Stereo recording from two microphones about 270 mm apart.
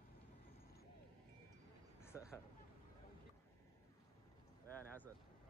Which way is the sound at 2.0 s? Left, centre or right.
Centre.